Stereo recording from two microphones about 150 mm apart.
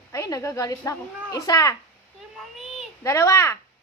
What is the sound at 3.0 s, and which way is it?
Speech, 20° left (ahead or behind).